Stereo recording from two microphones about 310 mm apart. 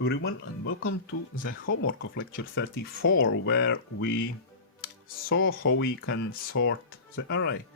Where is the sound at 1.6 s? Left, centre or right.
Left.